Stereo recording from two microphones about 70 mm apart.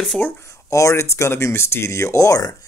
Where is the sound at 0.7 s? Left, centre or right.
Left.